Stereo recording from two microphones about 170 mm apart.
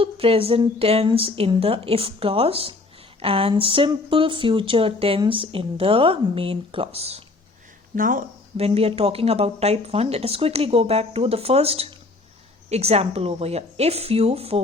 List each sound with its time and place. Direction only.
0.0 s speech: 35° right (ahead or behind)
7.9 s speech: 55° right (ahead or behind)
8.5 s speech: 35° right (ahead or behind)